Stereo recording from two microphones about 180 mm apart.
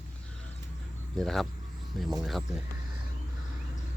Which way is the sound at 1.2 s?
Centre (ahead or behind).